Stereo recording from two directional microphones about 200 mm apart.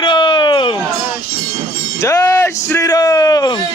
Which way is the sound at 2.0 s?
15° left (ahead or behind).